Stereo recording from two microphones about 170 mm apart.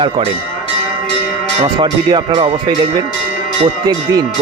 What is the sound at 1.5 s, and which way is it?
Speech, 25° right (ahead or behind).